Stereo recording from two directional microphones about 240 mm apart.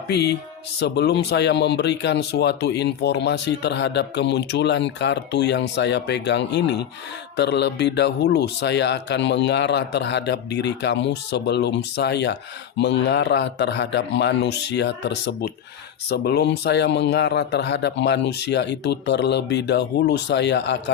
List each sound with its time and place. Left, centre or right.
0.1 s speech: left